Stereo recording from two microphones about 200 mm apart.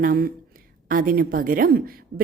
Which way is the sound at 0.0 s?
45° right (ahead or behind).